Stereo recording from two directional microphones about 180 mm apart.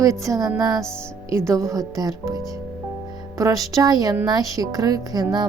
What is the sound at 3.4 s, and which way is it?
A woman's voice, 20° right (ahead or behind).